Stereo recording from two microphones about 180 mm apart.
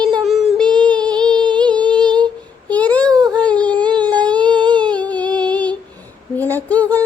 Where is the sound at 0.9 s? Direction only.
25° right (ahead or behind).